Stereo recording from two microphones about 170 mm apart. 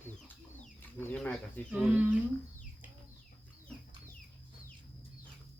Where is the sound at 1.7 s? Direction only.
5° right (ahead or behind).